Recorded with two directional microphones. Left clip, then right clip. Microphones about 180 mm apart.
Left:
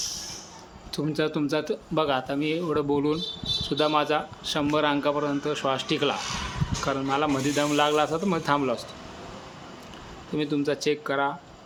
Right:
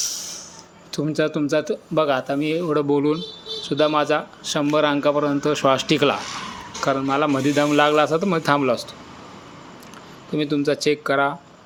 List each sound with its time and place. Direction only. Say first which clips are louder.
0.0 s music: right 6 dB; 20° right (ahead or behind)
0.9 s speech: right 5 dB; 20° right (ahead or behind)
10.3 s speech: right 5 dB; 20° right (ahead or behind)